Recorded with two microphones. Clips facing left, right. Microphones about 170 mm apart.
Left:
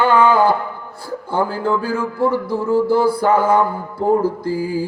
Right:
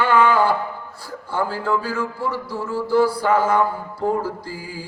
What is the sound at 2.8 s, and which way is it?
Mantra, 55° left (ahead or behind).